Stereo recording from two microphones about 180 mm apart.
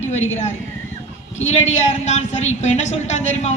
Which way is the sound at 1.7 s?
40° left (ahead or behind).